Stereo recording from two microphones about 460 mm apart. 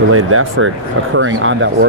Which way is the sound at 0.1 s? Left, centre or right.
Right.